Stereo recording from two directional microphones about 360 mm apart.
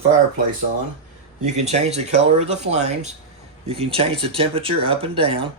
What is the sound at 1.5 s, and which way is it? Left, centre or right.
Speech, centre.